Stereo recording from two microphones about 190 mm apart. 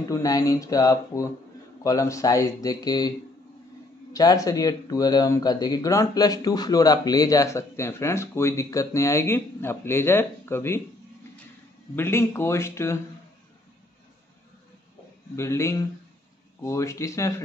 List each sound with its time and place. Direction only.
0.1 s speech: 20° left (ahead or behind)
11.9 s speech: 10° left (ahead or behind)
15.3 s speech: 15° left (ahead or behind)